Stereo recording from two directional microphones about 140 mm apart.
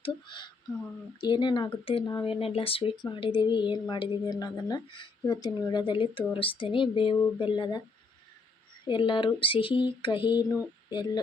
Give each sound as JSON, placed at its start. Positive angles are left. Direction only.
{"t": 0.0, "sound": "speech", "side_deg": 35}
{"t": 8.8, "sound": "speech", "side_deg": 35}